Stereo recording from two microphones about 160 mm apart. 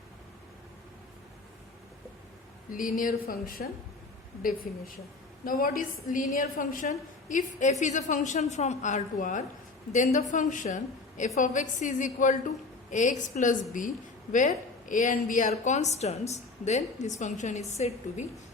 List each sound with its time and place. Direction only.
2.6 s speech: 55° left (ahead or behind)
5.5 s a woman's voice: 60° left (ahead or behind); by 18.3 s 45° left (ahead or behind)